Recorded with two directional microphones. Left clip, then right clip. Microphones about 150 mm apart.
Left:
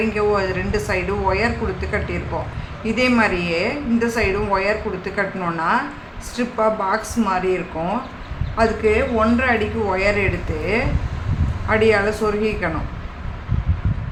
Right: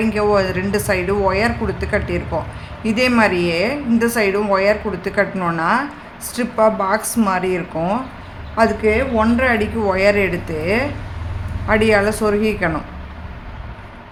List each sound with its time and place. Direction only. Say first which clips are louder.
0.1 s a woman's voice: right 3 dB; 65° right (ahead or behind)
11.7 s a woman's voice: right 2 dB; 65° right (ahead or behind)